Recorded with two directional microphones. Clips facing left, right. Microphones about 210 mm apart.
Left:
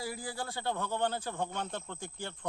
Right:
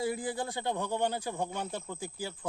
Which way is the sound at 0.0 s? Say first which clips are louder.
Right 6 dB; 20° right (ahead or behind).